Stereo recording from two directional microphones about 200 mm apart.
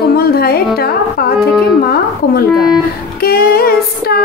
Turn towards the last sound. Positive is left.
turn(degrees=50)  # may be behind; listen again after turning